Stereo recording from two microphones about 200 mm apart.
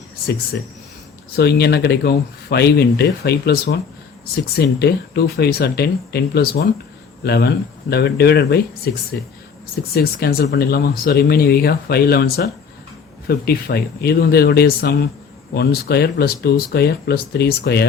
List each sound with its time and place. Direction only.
1.4 s speech: 55° left (ahead or behind)